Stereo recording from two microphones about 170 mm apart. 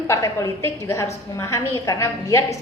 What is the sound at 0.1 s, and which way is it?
A woman's voice, 15° left (ahead or behind).